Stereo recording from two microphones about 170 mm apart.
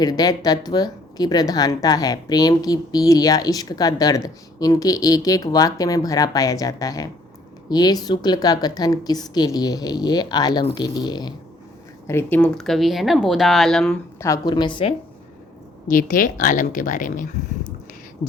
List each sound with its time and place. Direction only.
0.0 s a woman's voice: 25° left (ahead or behind)
12.0 s speech: 10° left (ahead or behind)
14.2 s a woman's voice: 20° left (ahead or behind)
15.9 s speech: 55° left (ahead or behind)
18.2 s a sound: 50° left (ahead or behind)